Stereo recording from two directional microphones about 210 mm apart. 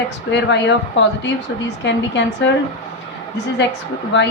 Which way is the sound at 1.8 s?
60° left (ahead or behind).